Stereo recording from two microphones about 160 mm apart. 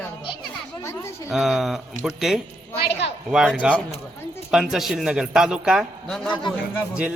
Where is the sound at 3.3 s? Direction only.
5° right (ahead or behind).